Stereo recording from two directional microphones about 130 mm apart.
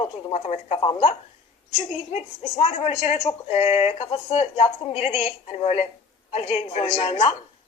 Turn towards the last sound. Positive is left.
turn(degrees=45)  # may be behind; listen again after turning